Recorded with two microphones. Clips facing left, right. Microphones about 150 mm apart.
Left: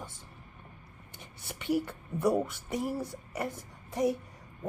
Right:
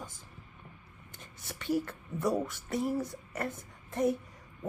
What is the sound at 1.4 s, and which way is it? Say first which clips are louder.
A woman's voice: left 1 dB; 15° left (ahead or behind).